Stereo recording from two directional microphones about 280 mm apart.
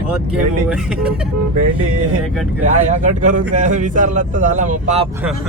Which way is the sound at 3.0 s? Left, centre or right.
Right.